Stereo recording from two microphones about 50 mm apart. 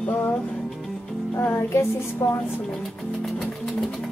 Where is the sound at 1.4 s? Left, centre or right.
Left.